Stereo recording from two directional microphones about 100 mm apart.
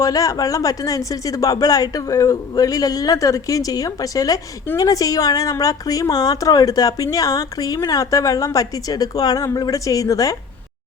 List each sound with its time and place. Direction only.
0.0 s a woman's voice: 35° left (ahead or behind)